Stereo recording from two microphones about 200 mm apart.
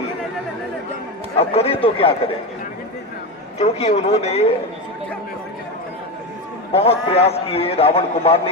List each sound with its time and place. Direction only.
1.4 s a man's voice: 30° left (ahead or behind)
3.6 s speech: 35° left (ahead or behind)
6.7 s a man's voice: 30° left (ahead or behind)